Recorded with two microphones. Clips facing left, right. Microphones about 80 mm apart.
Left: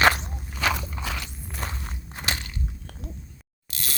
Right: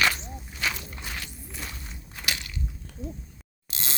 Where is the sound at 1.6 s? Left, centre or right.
Left.